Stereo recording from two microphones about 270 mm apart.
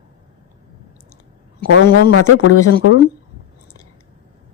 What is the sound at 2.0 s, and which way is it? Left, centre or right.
Speech, left.